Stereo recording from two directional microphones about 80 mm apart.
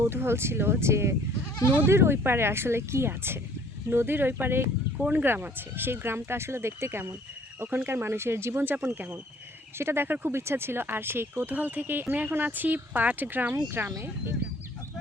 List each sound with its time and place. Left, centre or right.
0.0 s speech: right
4.9 s speech: centre
5.2 s speech: right